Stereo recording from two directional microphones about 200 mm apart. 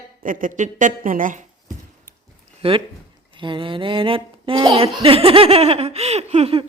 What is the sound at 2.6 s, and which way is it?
Speech, 30° right (ahead or behind).